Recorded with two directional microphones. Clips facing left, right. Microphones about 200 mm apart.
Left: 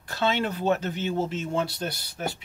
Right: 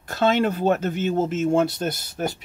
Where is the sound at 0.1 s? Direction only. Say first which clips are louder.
Right 6 dB; 45° right (ahead or behind).